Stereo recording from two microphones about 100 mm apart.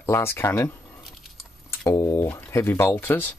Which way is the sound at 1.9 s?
30° left (ahead or behind).